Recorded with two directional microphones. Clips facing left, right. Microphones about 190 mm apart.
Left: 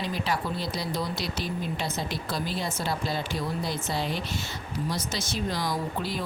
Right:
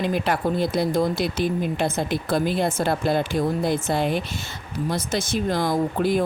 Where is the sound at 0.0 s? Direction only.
55° right (ahead or behind).